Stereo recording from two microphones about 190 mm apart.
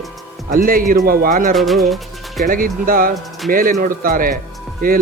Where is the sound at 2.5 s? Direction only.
50° right (ahead or behind).